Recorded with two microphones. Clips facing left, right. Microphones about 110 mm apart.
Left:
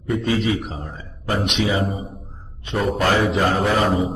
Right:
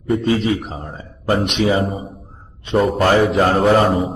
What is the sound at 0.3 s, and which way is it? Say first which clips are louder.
Speech: right 3 dB; 45° right (ahead or behind).